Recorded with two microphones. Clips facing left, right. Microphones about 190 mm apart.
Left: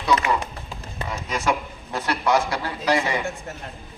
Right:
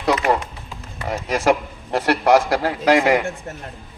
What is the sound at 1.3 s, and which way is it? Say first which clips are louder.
A man's voice: right 7 dB; 85° right.